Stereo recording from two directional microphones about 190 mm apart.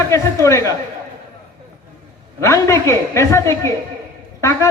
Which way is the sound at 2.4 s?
15° left (ahead or behind).